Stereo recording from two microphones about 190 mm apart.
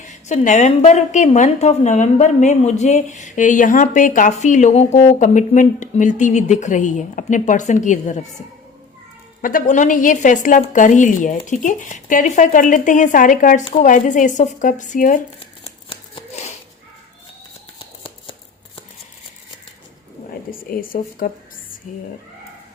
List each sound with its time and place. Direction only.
0.0 s a woman's voice: 40° left (ahead or behind)
9.4 s a woman's voice: 45° left (ahead or behind)
15.4 s a sound: 30° left (ahead or behind)
20.7 s a woman's voice: 50° left (ahead or behind)